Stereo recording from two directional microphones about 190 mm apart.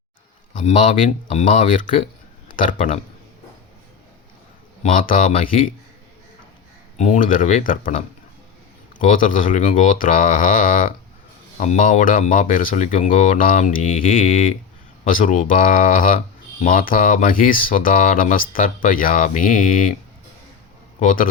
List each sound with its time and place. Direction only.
0.6 s speech: 30° left (ahead or behind)
1.5 s speech: 45° left (ahead or behind)
4.8 s speech: 45° left (ahead or behind)
7.0 s speech: 40° left (ahead or behind)
21.0 s speech: 45° left (ahead or behind)